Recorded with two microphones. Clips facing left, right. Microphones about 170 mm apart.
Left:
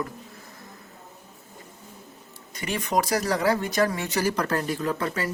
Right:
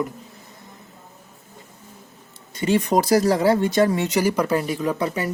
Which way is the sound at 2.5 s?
25° right (ahead or behind).